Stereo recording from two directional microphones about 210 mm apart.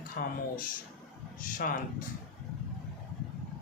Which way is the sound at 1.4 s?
40° left (ahead or behind).